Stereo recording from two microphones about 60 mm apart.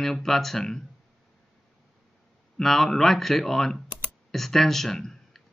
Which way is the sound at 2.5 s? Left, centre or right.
Centre.